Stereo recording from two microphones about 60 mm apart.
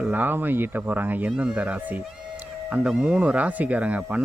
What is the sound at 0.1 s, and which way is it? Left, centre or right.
Speech, right.